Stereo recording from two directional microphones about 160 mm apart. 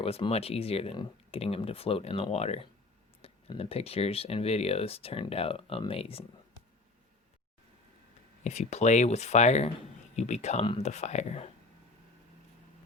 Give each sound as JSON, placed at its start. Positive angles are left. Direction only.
{"t": 0.0, "sound": "speech", "side_deg": 40}
{"t": 8.4, "sound": "speech", "side_deg": 45}